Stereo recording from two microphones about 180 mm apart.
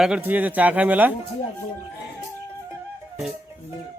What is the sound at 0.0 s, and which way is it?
Speech, 5° right (ahead or behind).